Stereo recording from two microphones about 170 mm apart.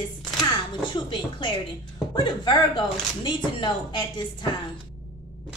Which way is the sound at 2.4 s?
25° left (ahead or behind).